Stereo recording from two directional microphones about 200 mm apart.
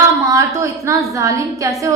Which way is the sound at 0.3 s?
15° right (ahead or behind).